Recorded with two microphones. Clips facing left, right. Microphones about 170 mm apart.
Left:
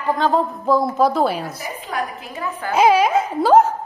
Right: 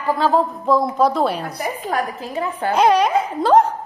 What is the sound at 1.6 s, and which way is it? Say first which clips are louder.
A woman's voice: right 4 dB; 45° right (ahead or behind).